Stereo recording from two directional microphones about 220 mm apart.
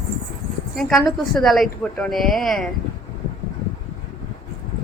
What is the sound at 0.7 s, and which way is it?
A woman's voice, centre (ahead or behind).